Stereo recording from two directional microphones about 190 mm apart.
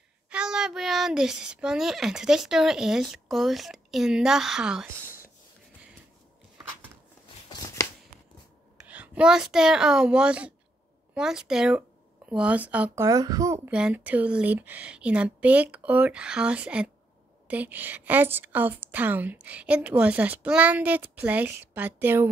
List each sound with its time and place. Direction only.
0.3 s speech: 5° right (ahead or behind)
7.4 s a sound: 20° left (ahead or behind)
8.8 s a woman's voice: 5° right (ahead or behind)
13.7 s a woman's voice: 5° right (ahead or behind)